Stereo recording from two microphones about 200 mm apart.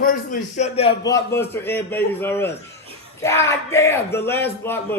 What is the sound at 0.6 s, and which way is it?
Speech, 30° left (ahead or behind).